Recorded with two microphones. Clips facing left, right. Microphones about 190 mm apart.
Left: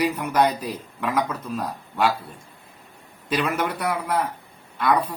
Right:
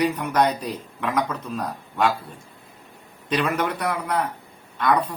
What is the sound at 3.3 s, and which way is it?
Speech, 5° left (ahead or behind).